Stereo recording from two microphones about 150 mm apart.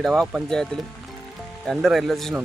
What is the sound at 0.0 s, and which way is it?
Speech, centre (ahead or behind).